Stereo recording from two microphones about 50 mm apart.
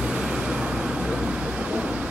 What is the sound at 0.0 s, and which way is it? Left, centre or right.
Vehicle, centre.